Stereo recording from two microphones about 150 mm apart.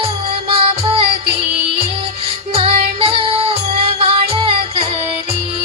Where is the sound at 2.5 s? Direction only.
40° right (ahead or behind).